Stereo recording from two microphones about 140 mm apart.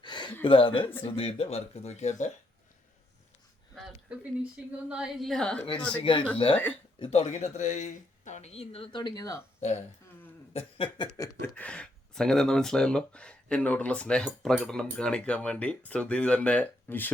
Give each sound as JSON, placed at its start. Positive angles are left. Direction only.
{"t": 0.0, "sound": "a sound", "side_deg": 35}
{"t": 0.4, "sound": "speech", "side_deg": 40}
{"t": 4.9, "sound": "a woman's voice", "side_deg": -5}
{"t": 5.9, "sound": "speech", "side_deg": 35}
{"t": 7.0, "sound": "speech", "side_deg": 50}
{"t": 9.6, "sound": "speech", "side_deg": 50}
{"t": 10.5, "sound": "a sound", "side_deg": 40}
{"t": 11.2, "sound": "speech", "side_deg": 15}